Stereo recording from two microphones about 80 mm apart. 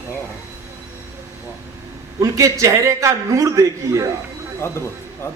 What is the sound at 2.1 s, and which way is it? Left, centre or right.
A man's voice, right.